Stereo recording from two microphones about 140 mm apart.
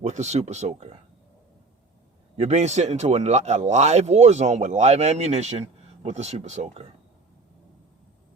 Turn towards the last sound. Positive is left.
turn(degrees=-55)  # may be behind; listen again after turning